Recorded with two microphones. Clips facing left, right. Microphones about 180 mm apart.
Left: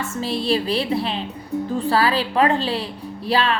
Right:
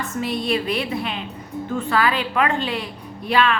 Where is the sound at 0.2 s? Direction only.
30° left (ahead or behind).